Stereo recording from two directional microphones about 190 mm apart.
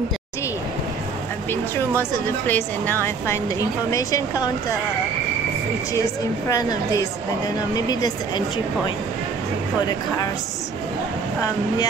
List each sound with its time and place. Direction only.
1.5 s speech: 10° left (ahead or behind)
6.5 s a woman's voice: 20° left (ahead or behind)
9.8 s a woman's voice: 20° left (ahead or behind)